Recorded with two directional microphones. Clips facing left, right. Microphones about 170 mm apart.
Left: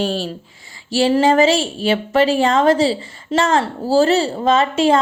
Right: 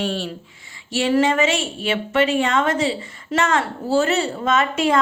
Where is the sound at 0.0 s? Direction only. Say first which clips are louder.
Left 4 dB; 35° left (ahead or behind).